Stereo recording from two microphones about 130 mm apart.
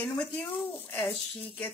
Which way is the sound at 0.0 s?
10° left (ahead or behind).